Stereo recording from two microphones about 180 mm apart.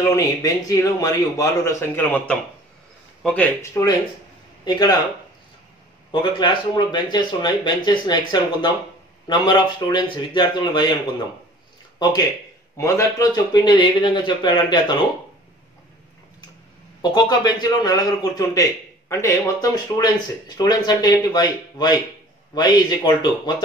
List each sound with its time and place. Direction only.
0.0 s speech: 20° left (ahead or behind)
4.6 s a man's voice: 20° left (ahead or behind)
6.4 s a man's voice: 25° left (ahead or behind)
12.7 s a man's voice: 15° left (ahead or behind)
17.0 s a man's voice: 20° left (ahead or behind)